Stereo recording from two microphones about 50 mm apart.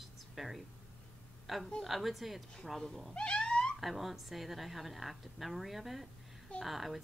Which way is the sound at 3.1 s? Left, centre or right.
Centre.